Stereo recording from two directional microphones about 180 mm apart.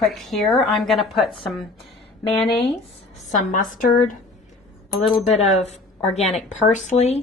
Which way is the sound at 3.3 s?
45° left (ahead or behind).